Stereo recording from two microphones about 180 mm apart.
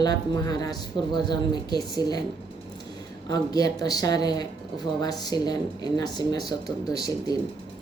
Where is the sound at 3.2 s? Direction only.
20° left (ahead or behind).